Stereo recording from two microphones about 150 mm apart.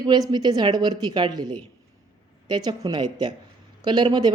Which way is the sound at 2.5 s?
30° right (ahead or behind).